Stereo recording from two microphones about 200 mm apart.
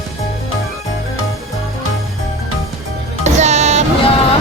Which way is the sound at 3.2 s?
35° right (ahead or behind).